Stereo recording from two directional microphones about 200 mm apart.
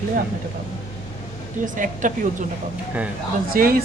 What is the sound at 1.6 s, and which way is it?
Speech, 40° right (ahead or behind).